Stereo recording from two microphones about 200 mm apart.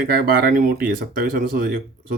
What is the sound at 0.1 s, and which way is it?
Speech, 45° right (ahead or behind).